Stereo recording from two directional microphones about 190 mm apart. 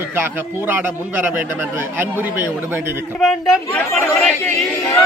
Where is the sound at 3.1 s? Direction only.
Centre (ahead or behind).